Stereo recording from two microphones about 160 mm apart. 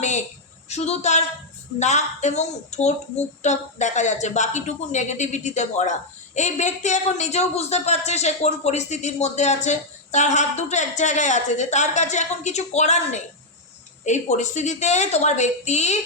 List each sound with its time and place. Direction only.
0.7 s speech: 45° left (ahead or behind)